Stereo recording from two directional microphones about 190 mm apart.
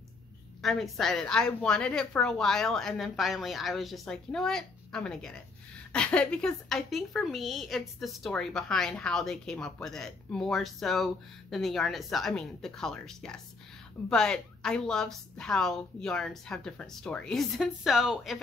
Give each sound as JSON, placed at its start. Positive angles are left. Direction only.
{"t": 0.6, "sound": "a woman's voice", "side_deg": 0}